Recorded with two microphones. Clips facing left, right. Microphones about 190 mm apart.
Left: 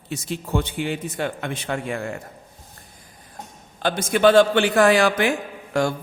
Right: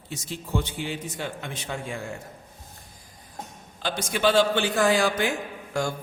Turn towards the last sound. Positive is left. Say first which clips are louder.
# left 6 dB
turn(degrees=65)  # may be behind; listen again after turning